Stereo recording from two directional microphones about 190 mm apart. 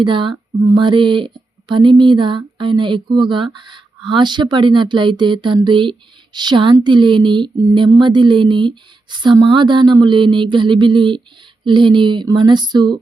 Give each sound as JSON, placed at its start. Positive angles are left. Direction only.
{"t": 0.0, "sound": "speech", "side_deg": -25}